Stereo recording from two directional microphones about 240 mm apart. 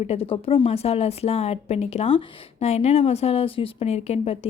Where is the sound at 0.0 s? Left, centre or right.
Left.